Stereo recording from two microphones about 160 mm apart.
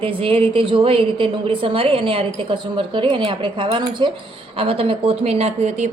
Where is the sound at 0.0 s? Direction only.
35° right (ahead or behind).